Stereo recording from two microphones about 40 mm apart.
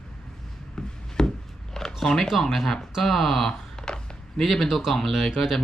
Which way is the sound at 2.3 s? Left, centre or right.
Centre.